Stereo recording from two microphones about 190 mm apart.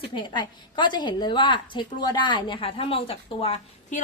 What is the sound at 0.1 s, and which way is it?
A woman's voice, 25° left (ahead or behind).